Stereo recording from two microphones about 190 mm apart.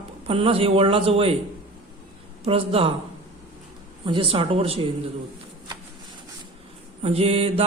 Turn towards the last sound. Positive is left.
turn(degrees=-30)  # may be behind; listen again after turning